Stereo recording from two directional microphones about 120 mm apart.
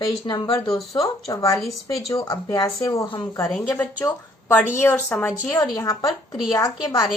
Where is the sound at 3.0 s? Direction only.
45° left (ahead or behind).